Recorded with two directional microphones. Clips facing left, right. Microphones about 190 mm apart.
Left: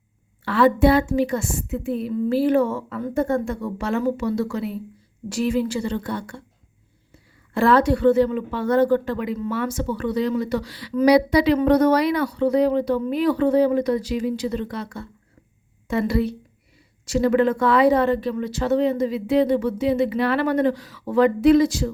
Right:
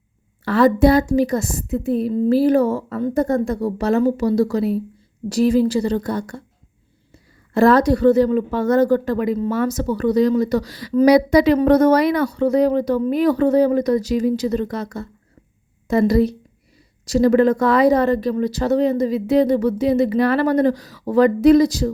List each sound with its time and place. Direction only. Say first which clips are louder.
0.4 s a woman's voice: right 3 dB; 40° right (ahead or behind)